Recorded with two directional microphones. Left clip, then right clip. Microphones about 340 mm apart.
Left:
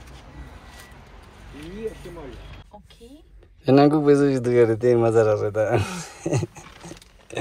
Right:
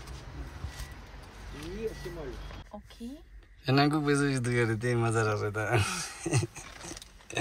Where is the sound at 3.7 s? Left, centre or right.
Centre.